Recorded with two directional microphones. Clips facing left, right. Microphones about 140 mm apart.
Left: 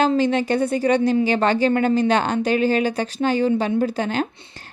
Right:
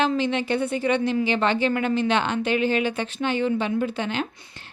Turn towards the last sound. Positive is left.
turn(degrees=40)  # may be behind; listen again after turning